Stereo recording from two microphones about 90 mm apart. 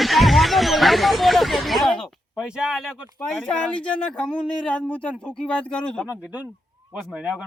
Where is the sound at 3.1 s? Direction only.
15° left (ahead or behind).